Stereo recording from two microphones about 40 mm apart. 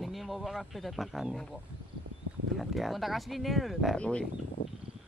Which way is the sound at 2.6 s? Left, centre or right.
Centre.